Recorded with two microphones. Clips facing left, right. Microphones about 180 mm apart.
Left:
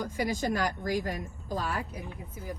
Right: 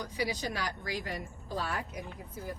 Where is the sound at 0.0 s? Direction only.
45° left (ahead or behind).